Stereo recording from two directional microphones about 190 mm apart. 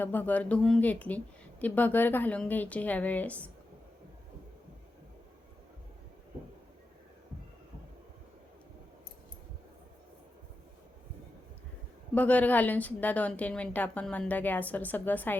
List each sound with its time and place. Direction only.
0.0 s a woman's voice: 10° left (ahead or behind)
12.1 s a woman's voice: 10° left (ahead or behind)